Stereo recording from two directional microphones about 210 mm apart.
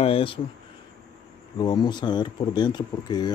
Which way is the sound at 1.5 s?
20° left (ahead or behind).